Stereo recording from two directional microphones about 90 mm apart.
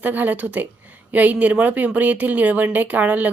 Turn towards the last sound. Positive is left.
turn(degrees=-15)  # may be behind; listen again after turning